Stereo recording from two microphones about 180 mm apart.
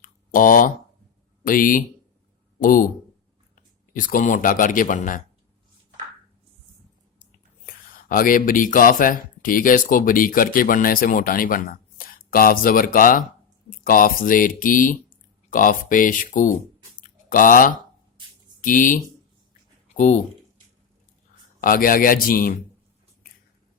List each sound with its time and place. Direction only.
0.0 s a sound: 50° left (ahead or behind)
1.5 s speech: 50° left (ahead or behind)
3.9 s speech: 50° left (ahead or behind)
7.7 s speech: 50° left (ahead or behind)
17.0 s a sound: 50° left (ahead or behind)
18.6 s speech: 50° left (ahead or behind)
20.0 s speech: 45° left (ahead or behind)
21.6 s speech: 50° left (ahead or behind)